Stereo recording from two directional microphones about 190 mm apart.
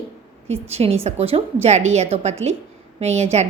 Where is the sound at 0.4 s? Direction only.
35° right (ahead or behind).